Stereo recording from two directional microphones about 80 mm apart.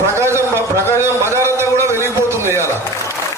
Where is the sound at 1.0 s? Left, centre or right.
Right.